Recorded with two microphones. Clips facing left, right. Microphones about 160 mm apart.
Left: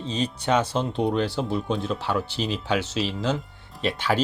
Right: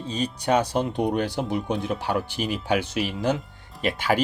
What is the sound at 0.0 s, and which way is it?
Speech, 10° right (ahead or behind).